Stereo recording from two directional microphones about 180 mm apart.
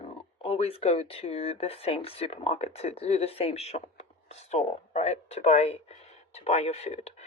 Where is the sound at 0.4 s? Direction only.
35° left (ahead or behind).